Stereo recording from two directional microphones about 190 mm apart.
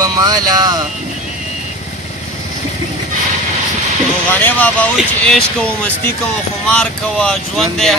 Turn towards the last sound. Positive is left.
turn(degrees=0)  # may be behind; listen again after turning